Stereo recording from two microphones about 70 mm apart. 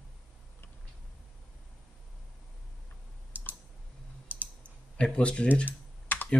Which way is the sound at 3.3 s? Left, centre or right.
Right.